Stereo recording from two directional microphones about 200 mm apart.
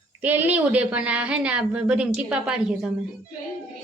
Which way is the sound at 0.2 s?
10° right (ahead or behind).